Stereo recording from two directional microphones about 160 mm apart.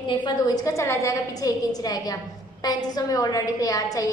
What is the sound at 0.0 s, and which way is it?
A woman's voice, 30° left (ahead or behind).